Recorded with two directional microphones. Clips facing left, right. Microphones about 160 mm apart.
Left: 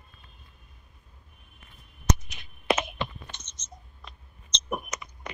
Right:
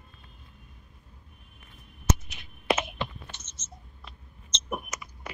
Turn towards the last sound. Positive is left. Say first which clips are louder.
# left 2 dB
turn(degrees=-5)  # may be behind; listen again after turning